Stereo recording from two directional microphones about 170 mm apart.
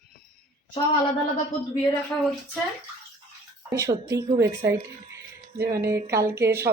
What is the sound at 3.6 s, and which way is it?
Speech, 20° right (ahead or behind).